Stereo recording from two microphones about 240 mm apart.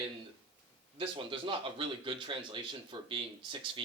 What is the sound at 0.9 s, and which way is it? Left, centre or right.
Speech, right.